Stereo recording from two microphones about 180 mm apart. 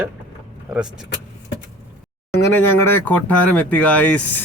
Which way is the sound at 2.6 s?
10° left (ahead or behind).